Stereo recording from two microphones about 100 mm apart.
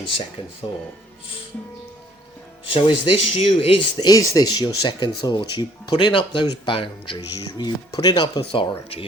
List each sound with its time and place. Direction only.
2.6 s speech: 65° left (ahead or behind); by 3.8 s 80° left
3.9 s speech: 40° left (ahead or behind); by 7.2 s 55° left (ahead or behind)
7.2 s speech: 35° left (ahead or behind); by 8.6 s 60° left (ahead or behind)